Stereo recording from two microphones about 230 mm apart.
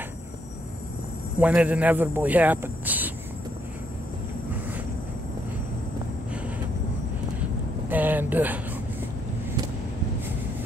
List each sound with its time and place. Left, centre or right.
1.4 s speech: centre
7.9 s vehicle: centre